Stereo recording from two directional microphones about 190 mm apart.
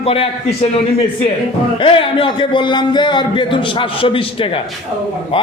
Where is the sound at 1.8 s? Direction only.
30° left (ahead or behind).